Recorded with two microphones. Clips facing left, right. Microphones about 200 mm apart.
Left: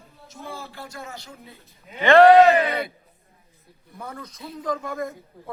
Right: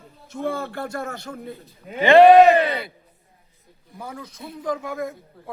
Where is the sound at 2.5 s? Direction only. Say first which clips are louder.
Right 2 dB; 30° right (ahead or behind).